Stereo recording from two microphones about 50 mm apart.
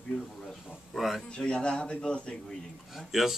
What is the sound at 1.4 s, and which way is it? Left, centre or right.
Speech, centre.